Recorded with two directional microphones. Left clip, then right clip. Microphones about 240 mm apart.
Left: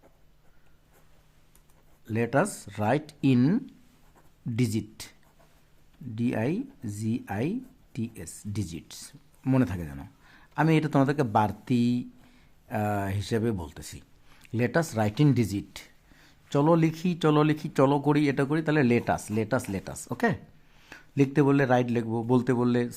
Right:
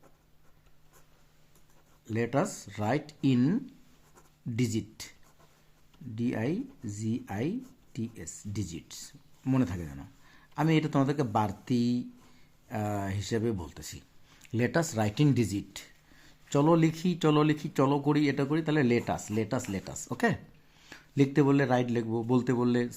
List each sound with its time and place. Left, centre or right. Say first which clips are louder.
2.0 s speech: left 4 dB; left
6.1 s speech: left 3 dB; left